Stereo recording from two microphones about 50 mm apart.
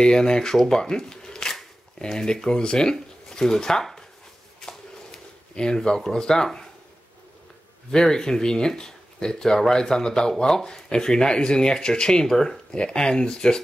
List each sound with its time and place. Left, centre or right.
0.0 s speech: centre
4.6 s a sound: centre
7.9 s speech: centre